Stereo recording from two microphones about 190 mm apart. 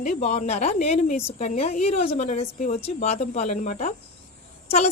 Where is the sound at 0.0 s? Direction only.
35° left (ahead or behind).